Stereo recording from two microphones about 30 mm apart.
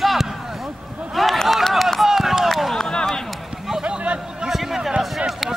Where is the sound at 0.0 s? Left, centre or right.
Centre.